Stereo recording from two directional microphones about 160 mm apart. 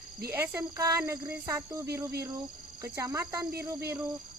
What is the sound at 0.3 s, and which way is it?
Speech, 15° right (ahead or behind).